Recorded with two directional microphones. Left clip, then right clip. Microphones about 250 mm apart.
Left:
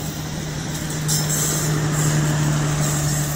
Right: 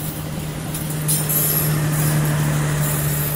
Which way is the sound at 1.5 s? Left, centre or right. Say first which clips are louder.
Even; right.